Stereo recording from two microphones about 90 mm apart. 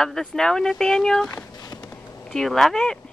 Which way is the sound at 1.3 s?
45° left (ahead or behind).